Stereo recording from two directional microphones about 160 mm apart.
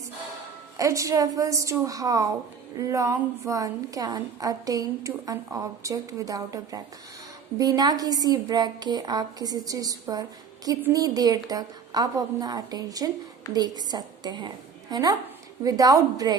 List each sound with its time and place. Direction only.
0.8 s a woman's voice: 20° right (ahead or behind)